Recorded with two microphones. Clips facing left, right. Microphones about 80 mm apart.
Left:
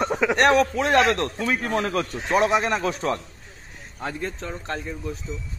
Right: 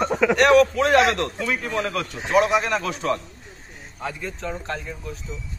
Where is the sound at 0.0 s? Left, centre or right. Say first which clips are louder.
Right 2 dB; centre.